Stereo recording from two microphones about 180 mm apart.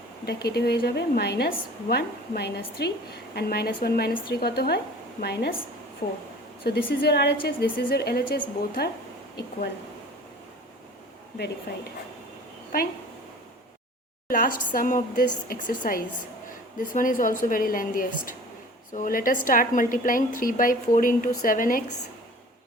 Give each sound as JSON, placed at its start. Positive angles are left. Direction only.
{"t": 0.3, "sound": "a woman's voice", "side_deg": 65}
{"t": 6.7, "sound": "a woman's voice", "side_deg": 55}
{"t": 14.3, "sound": "a woman's voice", "side_deg": 50}